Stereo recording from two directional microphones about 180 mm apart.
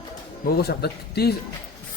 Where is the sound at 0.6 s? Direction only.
60° left (ahead or behind).